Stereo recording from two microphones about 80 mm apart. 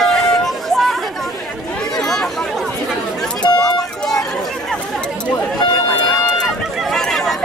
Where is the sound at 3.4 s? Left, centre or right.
Left.